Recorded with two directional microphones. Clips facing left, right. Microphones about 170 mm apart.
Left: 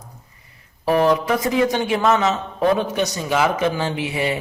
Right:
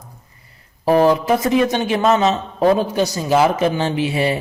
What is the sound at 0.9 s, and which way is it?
A man's voice, 30° right (ahead or behind).